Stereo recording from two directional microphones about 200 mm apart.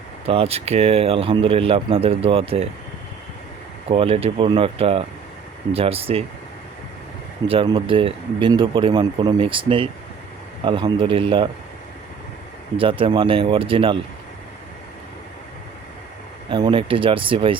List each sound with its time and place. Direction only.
0.3 s speech: 30° right (ahead or behind)
3.8 s speech: 30° right (ahead or behind)
7.4 s speech: 25° right (ahead or behind)
12.7 s speech: 25° right (ahead or behind)
16.5 s speech: 25° right (ahead or behind)